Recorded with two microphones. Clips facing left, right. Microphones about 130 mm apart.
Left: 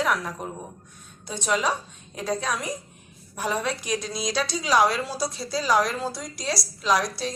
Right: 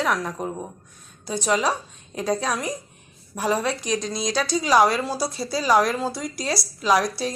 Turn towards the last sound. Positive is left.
turn(degrees=-5)  # may be behind; listen again after turning